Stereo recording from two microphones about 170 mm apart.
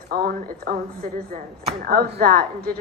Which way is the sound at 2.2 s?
60° right (ahead or behind).